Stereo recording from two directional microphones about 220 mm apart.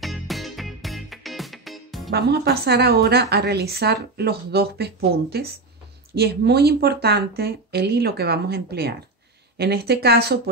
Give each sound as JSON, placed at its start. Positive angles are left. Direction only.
{"t": 0.0, "sound": "music", "side_deg": 0}
{"t": 2.1, "sound": "a woman's voice", "side_deg": -50}